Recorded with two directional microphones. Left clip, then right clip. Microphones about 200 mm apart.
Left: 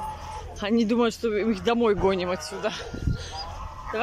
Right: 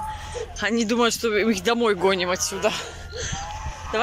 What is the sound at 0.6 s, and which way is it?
Speech, 15° left (ahead or behind).